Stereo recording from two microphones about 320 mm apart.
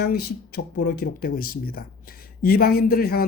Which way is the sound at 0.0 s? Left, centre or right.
Left.